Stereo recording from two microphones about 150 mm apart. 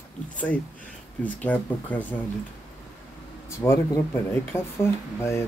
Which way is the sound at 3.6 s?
20° left (ahead or behind).